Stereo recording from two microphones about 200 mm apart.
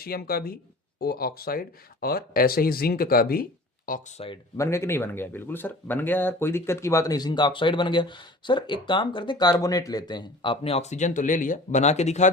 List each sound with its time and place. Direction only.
0.0 s speech: 50° left (ahead or behind)
4.5 s speech: 15° left (ahead or behind); by 12.3 s 35° left (ahead or behind)